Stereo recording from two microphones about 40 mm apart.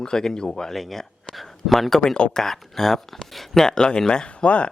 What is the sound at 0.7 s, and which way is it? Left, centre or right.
Speech, centre.